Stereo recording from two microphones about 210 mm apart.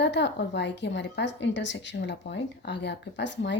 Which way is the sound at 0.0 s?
55° left (ahead or behind).